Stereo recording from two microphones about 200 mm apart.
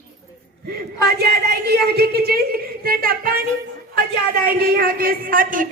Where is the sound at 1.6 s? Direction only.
55° right (ahead or behind).